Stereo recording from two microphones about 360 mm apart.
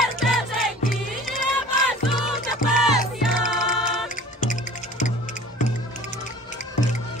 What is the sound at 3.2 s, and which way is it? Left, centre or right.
Music, centre.